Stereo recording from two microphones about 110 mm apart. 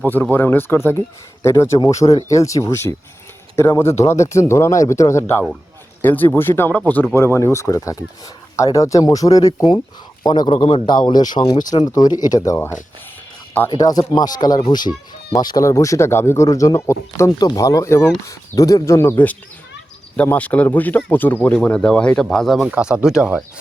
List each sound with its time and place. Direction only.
0.1 s a man's voice: 15° left (ahead or behind); by 10.5 s 40° left (ahead or behind)
10.5 s a man's voice: 60° left (ahead or behind)
10.8 s speech: 45° left (ahead or behind)
13.7 s speech: 35° left (ahead or behind); by 22.6 s 5° left (ahead or behind)
22.6 s speech: 10° right (ahead or behind)